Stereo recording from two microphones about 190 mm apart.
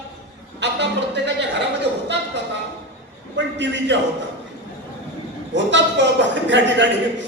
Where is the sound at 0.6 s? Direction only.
65° right (ahead or behind).